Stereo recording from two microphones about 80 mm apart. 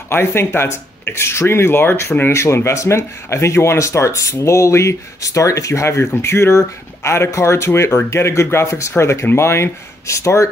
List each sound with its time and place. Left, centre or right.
0.1 s speech: left